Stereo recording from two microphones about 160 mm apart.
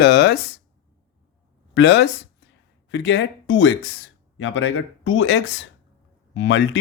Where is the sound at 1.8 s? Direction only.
90° left.